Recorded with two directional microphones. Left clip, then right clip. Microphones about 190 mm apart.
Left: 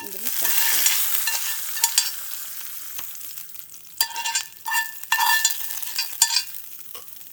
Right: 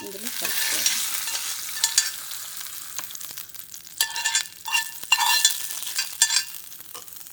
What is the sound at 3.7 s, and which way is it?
Stir, 5° right (ahead or behind).